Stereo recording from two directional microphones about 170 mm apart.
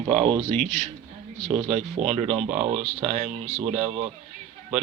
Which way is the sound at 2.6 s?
40° right (ahead or behind).